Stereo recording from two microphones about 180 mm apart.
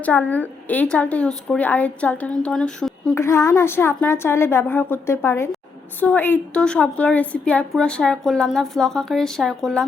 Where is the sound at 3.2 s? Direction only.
15° left (ahead or behind).